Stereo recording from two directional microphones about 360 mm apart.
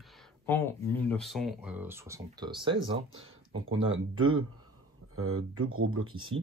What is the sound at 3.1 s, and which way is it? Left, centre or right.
Speech, right.